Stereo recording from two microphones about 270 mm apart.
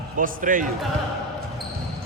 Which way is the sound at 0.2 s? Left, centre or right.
Right.